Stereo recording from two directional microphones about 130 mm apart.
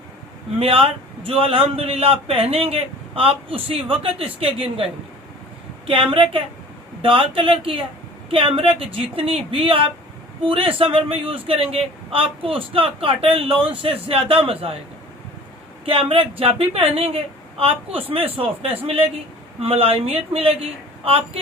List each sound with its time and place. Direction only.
0.6 s a man's voice: 45° right (ahead or behind)
5.9 s a woman's voice: 40° right (ahead or behind)
15.9 s a man's voice: 45° right (ahead or behind)